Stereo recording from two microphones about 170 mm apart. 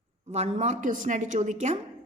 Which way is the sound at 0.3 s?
40° right (ahead or behind).